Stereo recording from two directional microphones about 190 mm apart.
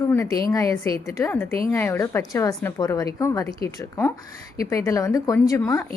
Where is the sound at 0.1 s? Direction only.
10° left (ahead or behind).